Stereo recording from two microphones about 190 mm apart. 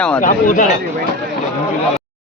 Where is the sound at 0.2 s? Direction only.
45° left (ahead or behind).